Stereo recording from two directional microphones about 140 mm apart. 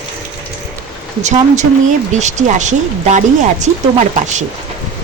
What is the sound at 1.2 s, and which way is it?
Speech, 60° right (ahead or behind).